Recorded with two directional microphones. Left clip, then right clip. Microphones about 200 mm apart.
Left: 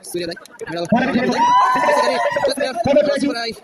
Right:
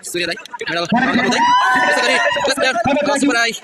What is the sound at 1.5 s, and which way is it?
Speech, 60° left (ahead or behind).